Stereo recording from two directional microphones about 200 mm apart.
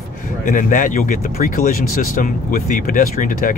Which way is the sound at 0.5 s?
40° left (ahead or behind).